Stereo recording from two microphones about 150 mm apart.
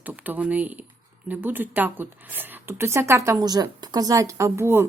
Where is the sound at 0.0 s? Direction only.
10° right (ahead or behind).